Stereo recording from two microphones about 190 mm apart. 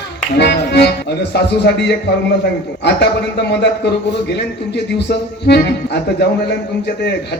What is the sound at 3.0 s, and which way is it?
Speech, 60° left (ahead or behind).